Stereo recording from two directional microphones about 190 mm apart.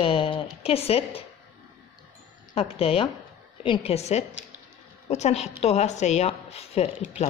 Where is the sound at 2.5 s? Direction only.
30° left (ahead or behind).